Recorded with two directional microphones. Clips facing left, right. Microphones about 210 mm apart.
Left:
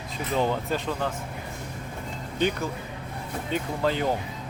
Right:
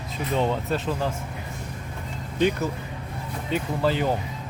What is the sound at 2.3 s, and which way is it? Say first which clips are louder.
Speech: right 3 dB; 5° right (ahead or behind).